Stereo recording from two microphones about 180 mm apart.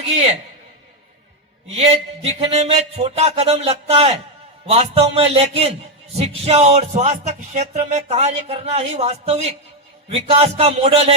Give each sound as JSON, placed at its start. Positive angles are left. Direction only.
{"t": 1.6, "sound": "speech", "side_deg": -35}